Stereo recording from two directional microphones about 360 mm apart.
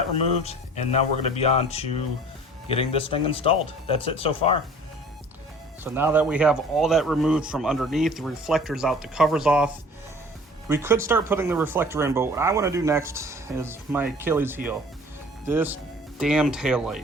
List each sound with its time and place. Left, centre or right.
0.9 s speech: centre
5.8 s speech: centre
10.7 s speech: centre